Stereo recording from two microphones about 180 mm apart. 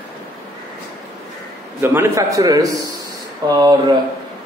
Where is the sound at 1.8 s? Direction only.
15° right (ahead or behind).